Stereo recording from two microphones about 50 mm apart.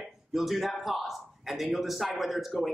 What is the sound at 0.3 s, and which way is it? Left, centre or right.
A man's voice, centre.